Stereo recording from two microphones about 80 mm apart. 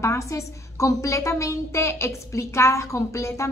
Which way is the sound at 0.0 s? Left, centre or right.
Left.